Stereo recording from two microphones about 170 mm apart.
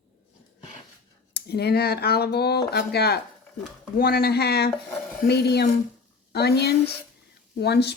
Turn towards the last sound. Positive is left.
turn(degrees=75)  # may be behind; listen again after turning